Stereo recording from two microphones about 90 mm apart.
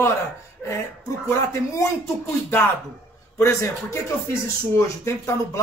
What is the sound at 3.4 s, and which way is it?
A man's voice, 35° left (ahead or behind).